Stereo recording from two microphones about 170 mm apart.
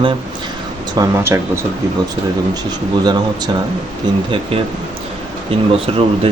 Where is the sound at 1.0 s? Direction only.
15° right (ahead or behind).